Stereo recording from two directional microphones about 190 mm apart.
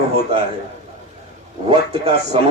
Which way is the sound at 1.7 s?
35° right (ahead or behind).